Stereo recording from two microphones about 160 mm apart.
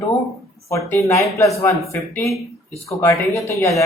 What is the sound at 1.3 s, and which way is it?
Speech, 20° left (ahead or behind).